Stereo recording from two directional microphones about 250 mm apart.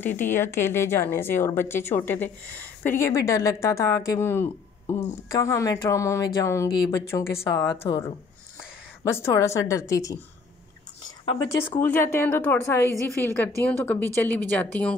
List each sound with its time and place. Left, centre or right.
0.0 s a woman's voice: centre
9.1 s a woman's voice: centre